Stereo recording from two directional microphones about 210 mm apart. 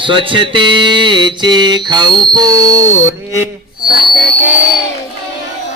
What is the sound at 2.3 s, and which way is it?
Speech, 15° right (ahead or behind).